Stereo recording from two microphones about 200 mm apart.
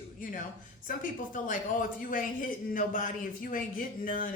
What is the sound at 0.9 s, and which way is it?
A woman's voice, 40° left (ahead or behind).